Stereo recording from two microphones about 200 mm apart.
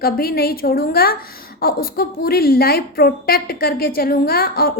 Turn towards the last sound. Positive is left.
turn(degrees=50)  # may be behind; listen again after turning